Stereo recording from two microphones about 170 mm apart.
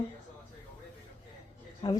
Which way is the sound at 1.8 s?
25° left (ahead or behind).